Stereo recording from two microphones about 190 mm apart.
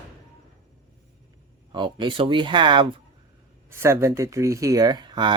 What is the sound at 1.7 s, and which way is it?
Speech, 25° right (ahead or behind).